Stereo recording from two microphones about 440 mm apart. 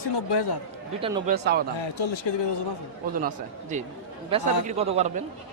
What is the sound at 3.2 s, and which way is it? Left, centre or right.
Speech, centre.